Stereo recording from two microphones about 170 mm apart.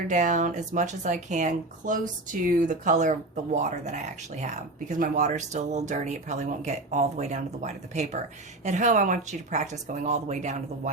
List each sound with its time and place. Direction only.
0.1 s speech: 50° right (ahead or behind)